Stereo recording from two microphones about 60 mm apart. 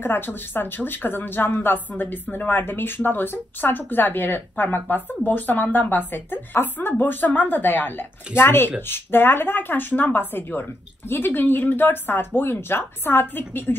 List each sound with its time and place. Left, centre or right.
0.0 s speech: left